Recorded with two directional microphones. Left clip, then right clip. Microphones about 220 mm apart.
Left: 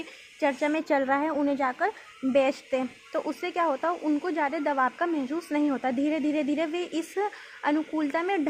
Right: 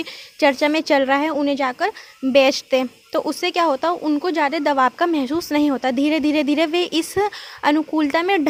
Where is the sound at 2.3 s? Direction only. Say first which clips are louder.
Right 9 dB; 45° right (ahead or behind).